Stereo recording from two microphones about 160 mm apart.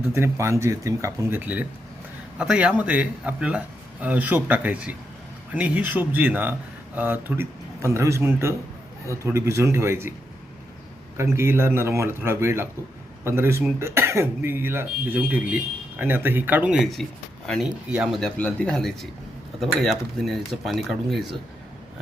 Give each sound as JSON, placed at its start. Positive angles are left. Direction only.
{"t": 0.1, "sound": "speech", "side_deg": -15}
{"t": 11.2, "sound": "speech", "side_deg": -15}